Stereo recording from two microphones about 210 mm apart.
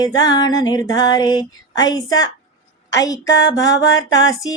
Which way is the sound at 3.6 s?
65° left (ahead or behind).